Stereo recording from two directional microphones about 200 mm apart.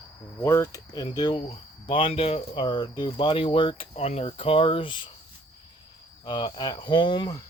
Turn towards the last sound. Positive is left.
turn(degrees=20)  # may be behind; listen again after turning